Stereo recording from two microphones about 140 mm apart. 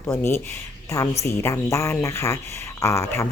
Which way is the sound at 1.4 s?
20° left (ahead or behind).